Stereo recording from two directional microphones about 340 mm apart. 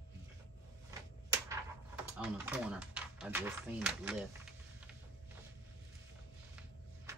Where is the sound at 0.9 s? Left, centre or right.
Centre.